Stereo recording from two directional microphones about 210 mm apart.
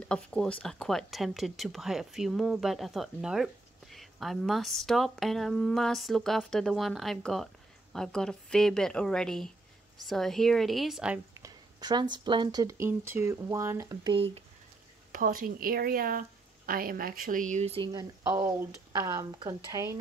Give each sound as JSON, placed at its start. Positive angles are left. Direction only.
{"t": 0.0, "sound": "a woman's voice", "side_deg": 5}
{"t": 14.1, "sound": "speech", "side_deg": -30}
{"t": 15.1, "sound": "a woman's voice", "side_deg": -40}
{"t": 17.9, "sound": "a woman's voice", "side_deg": -15}